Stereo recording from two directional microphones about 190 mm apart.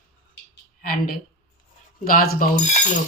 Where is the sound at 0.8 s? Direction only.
50° left (ahead or behind).